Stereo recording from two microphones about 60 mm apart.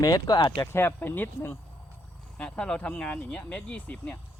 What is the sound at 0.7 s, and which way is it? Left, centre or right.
Speech, left.